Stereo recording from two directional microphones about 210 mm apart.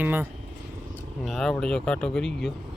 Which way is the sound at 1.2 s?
Centre (ahead or behind).